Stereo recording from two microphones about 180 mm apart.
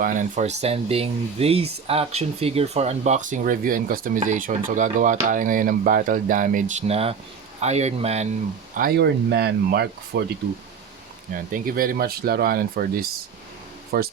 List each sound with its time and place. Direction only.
0.0 s speech: 45° right (ahead or behind)
8.7 s speech: 60° right (ahead or behind)
11.5 s speech: 50° right (ahead or behind)